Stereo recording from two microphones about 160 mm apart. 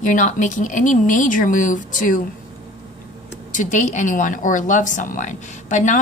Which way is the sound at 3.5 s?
55° left (ahead or behind).